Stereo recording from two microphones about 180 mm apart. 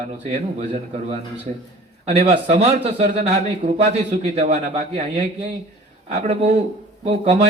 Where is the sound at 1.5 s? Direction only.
45° right (ahead or behind).